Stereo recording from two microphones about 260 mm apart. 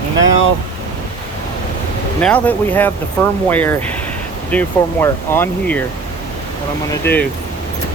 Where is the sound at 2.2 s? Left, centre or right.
Centre.